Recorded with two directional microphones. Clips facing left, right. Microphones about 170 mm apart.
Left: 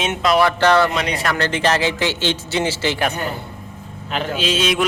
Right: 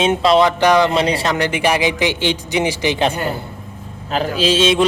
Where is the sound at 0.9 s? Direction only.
30° right (ahead or behind).